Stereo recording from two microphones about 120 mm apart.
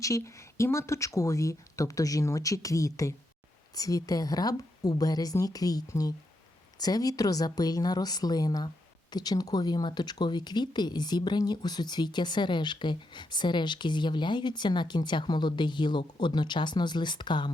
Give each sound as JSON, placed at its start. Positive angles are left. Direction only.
{"t": 0.0, "sound": "speech", "side_deg": 25}